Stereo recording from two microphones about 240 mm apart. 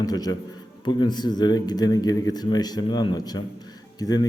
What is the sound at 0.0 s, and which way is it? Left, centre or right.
A man's voice, centre.